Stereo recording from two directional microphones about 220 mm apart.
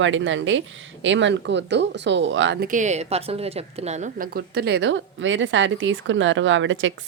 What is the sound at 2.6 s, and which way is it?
A woman's voice, 35° right (ahead or behind).